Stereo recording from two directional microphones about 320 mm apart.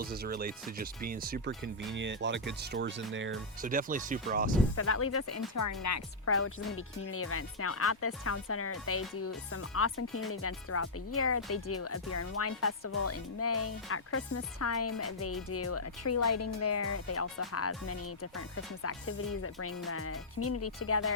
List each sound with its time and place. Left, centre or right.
0.0 s speech: right
4.7 s speech: left
5.5 s speech: left